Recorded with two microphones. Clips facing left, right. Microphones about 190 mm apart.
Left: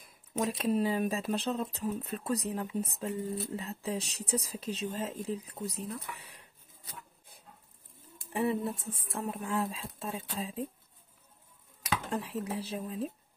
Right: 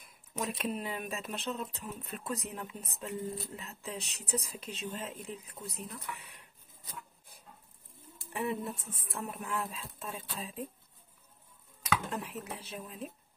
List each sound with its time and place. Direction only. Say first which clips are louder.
0.4 s speech: left 6 dB; 30° left (ahead or behind)
8.3 s speech: left 4 dB; 30° left (ahead or behind)
12.1 s speech: left 5 dB; 30° left (ahead or behind)